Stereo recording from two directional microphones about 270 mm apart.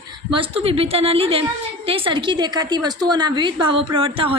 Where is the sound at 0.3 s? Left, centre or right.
Centre.